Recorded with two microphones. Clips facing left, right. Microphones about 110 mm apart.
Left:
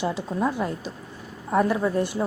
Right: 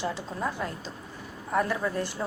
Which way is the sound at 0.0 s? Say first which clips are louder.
Left 6 dB; 20° left (ahead or behind).